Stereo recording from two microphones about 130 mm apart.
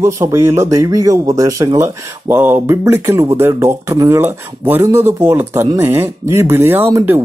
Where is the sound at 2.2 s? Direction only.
15° right (ahead or behind).